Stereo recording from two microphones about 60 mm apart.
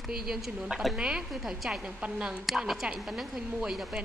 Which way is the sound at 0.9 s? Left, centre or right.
Centre.